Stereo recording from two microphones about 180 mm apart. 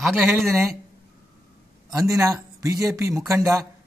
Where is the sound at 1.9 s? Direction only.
20° right (ahead or behind).